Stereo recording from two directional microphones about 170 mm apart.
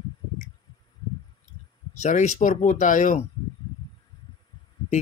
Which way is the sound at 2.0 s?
45° left (ahead or behind).